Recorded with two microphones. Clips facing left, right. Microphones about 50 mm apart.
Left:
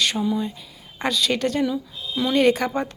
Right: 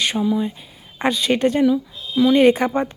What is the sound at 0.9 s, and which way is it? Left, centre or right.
Speech, right.